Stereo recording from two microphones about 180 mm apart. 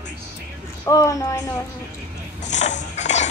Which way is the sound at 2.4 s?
40° left (ahead or behind).